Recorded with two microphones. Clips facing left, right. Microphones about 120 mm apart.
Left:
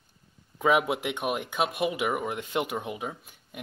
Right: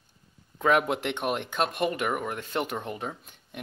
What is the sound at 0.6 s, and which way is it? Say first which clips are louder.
Speech: even; 10° left (ahead or behind).